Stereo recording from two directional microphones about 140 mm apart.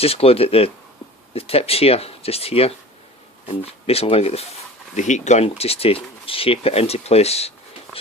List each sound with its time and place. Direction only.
0.0 s speech: 45° left (ahead or behind)
4.9 s speech: 60° left (ahead or behind)